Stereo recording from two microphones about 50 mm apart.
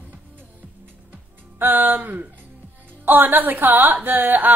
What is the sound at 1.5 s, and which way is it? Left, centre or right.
A woman's voice, right.